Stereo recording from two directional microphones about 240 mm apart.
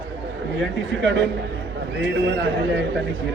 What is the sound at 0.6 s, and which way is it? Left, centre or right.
Speech, right.